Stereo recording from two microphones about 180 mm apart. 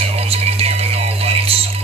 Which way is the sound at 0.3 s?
35° right (ahead or behind).